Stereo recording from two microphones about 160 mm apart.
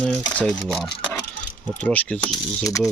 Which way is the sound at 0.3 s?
10° left (ahead or behind).